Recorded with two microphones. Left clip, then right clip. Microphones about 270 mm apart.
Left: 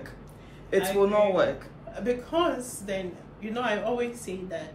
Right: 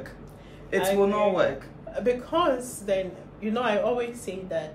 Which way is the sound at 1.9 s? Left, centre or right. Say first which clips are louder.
Right 4 dB; centre.